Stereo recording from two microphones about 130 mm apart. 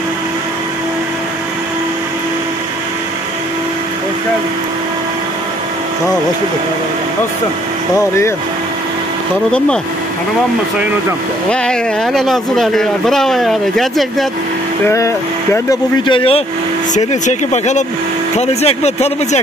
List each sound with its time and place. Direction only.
11.5 s speech: 5° left (ahead or behind)
14.9 s speech: 20° left (ahead or behind)
16.1 s speech: 45° left (ahead or behind)
16.9 s speech: 65° left (ahead or behind)